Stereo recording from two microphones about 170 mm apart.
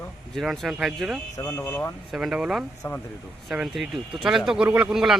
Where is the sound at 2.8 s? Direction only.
20° left (ahead or behind).